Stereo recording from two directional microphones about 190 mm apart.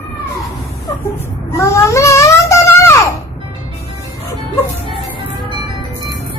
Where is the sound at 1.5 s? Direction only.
15° left (ahead or behind).